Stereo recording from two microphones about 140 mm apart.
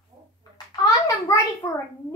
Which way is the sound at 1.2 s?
20° left (ahead or behind).